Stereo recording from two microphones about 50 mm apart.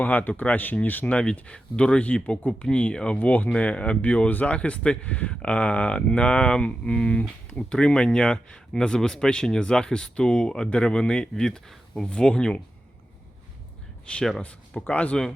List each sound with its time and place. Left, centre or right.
0.0 s speech: left
1.1 s speech: centre
3.2 s speech: left; by 12.5 s centre
14.1 s speech: left